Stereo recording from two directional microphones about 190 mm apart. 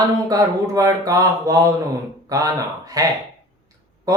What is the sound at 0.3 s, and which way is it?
Mantra, 20° right (ahead or behind).